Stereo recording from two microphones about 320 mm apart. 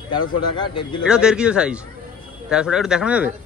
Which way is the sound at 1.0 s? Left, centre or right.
Centre.